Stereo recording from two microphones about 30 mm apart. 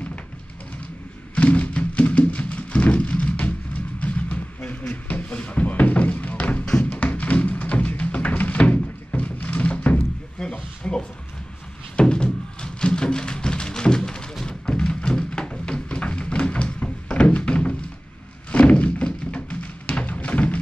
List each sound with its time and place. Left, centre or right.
1.3 s music: left
1.7 s music: left
2.9 s vehicle: left
5.0 s a sound: left
5.5 s music: left
6.7 s music: left
7.0 s tap: left
8.1 s music: left
10.4 s a sound: left
12.0 s music: left
15.6 s a sound: left
17.5 s thunk: left
20.1 s music: left